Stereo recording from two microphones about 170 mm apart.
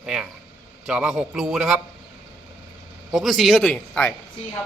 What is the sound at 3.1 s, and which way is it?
A man's voice, centre (ahead or behind).